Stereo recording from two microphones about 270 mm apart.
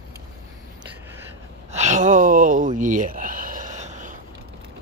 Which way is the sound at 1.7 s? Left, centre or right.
Right.